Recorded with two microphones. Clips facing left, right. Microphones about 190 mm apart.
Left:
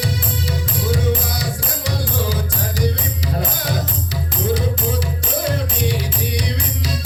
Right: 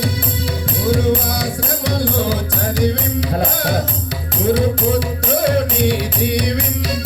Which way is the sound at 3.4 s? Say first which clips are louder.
Right 3 dB; 60° right (ahead or behind).